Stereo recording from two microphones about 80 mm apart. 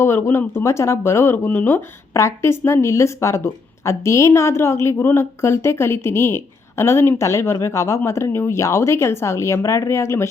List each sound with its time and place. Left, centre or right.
0.0 s speech: left